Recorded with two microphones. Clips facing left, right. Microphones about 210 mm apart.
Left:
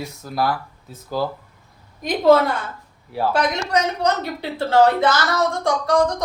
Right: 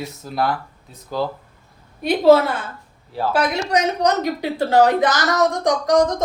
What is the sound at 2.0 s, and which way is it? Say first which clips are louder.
A woman's voice: right 2 dB; 10° right (ahead or behind).